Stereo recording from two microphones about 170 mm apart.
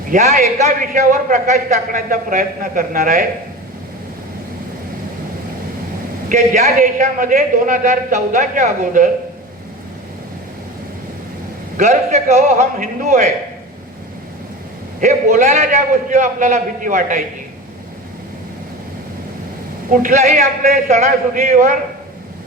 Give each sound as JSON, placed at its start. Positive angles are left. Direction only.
{"t": 0.1, "sound": "a man's voice", "side_deg": -45}
{"t": 6.2, "sound": "a man's voice", "side_deg": -50}
{"t": 11.8, "sound": "a man's voice", "side_deg": -45}
{"t": 15.0, "sound": "a man's voice", "side_deg": -45}
{"t": 19.9, "sound": "a man's voice", "side_deg": -50}